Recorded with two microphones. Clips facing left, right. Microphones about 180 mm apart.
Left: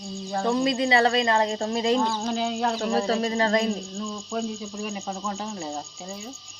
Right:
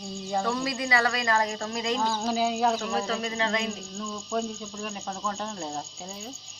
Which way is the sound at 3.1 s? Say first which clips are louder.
Left 6 dB; 35° left (ahead or behind).